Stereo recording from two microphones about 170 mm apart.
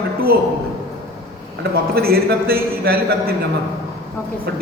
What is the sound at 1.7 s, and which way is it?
A man's voice, 65° right (ahead or behind).